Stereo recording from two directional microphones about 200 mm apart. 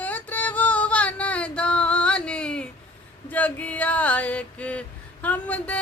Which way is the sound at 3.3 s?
10° left (ahead or behind).